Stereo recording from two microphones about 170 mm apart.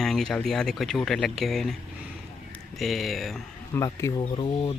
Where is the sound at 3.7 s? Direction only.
15° left (ahead or behind).